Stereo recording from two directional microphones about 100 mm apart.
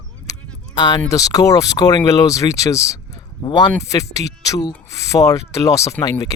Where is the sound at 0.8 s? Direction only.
45° left (ahead or behind).